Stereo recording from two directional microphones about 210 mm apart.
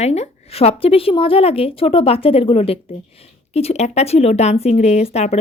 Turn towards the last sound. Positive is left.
turn(degrees=30)  # may be behind; listen again after turning